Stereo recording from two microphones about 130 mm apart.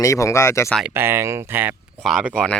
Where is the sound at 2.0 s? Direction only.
Centre (ahead or behind).